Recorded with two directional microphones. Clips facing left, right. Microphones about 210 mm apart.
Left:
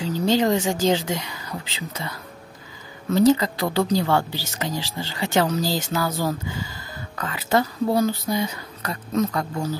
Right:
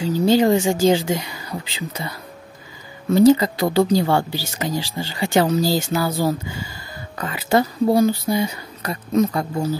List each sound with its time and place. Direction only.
0.1 s speech: 10° right (ahead or behind)